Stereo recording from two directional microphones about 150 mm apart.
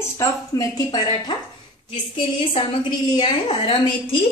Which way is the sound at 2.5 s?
30° left (ahead or behind).